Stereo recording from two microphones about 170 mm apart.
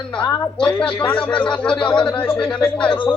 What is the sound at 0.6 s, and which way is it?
Speech, 5° left (ahead or behind).